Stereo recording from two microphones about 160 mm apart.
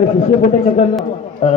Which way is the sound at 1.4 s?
40° left (ahead or behind).